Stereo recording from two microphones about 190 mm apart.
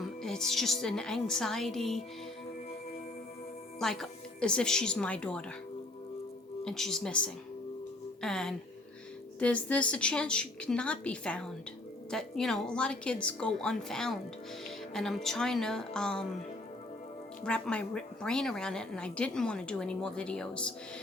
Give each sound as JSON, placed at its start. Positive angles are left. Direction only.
{"t": 0.0, "sound": "a woman's voice", "side_deg": 0}
{"t": 3.8, "sound": "a woman's voice", "side_deg": 0}
{"t": 6.7, "sound": "a woman's voice", "side_deg": 0}
{"t": 17.4, "sound": "a woman's voice", "side_deg": 5}